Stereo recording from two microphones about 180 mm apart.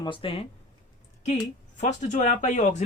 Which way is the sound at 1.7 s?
40° left (ahead or behind).